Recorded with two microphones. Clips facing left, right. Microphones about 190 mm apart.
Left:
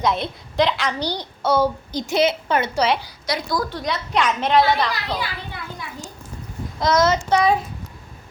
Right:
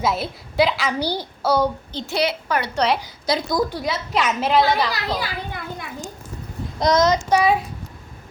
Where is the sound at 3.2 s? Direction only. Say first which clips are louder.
Right 3 dB; 25° right (ahead or behind); by 4.9 s centre (ahead or behind).